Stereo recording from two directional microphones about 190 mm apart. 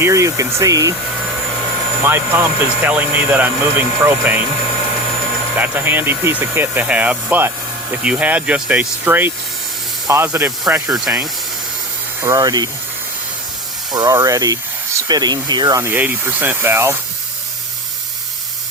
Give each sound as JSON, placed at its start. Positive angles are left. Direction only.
{"t": 0.0, "sound": "speech", "side_deg": -15}
{"t": 2.0, "sound": "speech", "side_deg": -10}
{"t": 5.5, "sound": "speech", "side_deg": -10}
{"t": 12.2, "sound": "speech", "side_deg": -20}
{"t": 13.9, "sound": "speech", "side_deg": -20}